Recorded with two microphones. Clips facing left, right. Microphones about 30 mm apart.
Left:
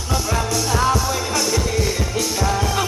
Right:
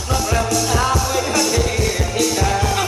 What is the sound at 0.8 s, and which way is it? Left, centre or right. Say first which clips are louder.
Music: right 1 dB; centre.